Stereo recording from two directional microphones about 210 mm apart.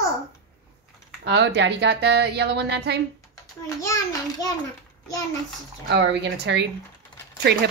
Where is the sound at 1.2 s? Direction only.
55° right (ahead or behind).